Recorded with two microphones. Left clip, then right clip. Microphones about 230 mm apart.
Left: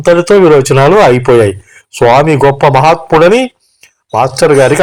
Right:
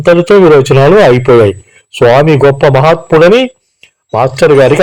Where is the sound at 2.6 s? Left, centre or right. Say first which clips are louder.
Even; left.